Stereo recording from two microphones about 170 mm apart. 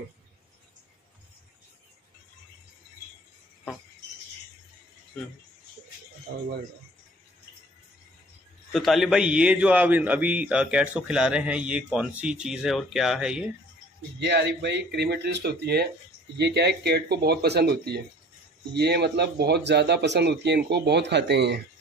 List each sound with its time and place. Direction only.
8.7 s a man's voice: centre (ahead or behind)
14.2 s speech: 85° right